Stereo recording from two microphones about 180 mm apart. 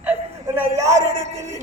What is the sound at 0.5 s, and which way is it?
Speech, 15° right (ahead or behind).